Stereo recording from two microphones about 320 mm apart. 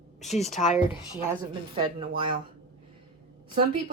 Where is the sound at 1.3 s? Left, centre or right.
Centre.